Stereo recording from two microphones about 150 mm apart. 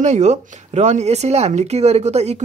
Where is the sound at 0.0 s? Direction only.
50° right (ahead or behind).